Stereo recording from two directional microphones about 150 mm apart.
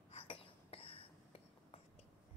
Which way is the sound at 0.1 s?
40° left (ahead or behind).